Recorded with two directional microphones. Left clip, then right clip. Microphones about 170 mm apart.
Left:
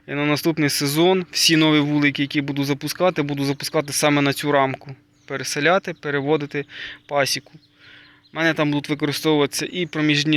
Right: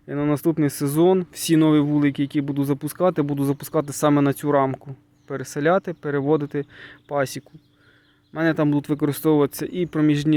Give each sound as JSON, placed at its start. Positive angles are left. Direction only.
{"t": 0.1, "sound": "speech", "side_deg": -30}
{"t": 8.4, "sound": "speech", "side_deg": -35}